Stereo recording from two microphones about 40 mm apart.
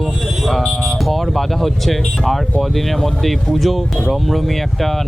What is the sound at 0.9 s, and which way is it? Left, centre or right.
Speech, centre.